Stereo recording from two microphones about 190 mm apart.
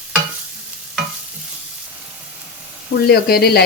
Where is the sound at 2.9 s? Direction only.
55° left (ahead or behind).